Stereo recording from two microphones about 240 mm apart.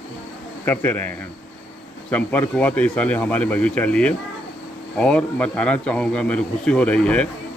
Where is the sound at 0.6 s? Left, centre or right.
Centre.